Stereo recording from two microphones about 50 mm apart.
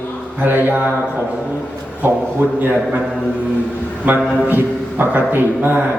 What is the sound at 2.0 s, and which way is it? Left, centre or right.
Speech, right.